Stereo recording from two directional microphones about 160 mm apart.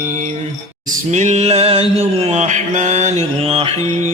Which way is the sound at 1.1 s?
45° right (ahead or behind).